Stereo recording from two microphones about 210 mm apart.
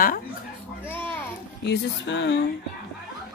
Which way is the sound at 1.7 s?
55° left (ahead or behind).